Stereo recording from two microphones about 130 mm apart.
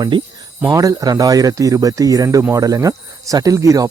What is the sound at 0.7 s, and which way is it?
Speech, 25° right (ahead or behind).